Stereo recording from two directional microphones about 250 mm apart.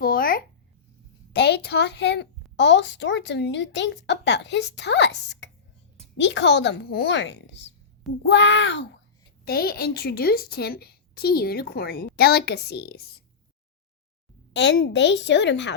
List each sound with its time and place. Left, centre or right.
0.0 s a sound: left
1.3 s a woman's voice: left
14.5 s a woman's voice: left